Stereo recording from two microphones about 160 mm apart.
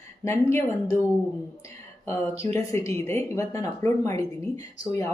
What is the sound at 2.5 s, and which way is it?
Speech, 15° left (ahead or behind).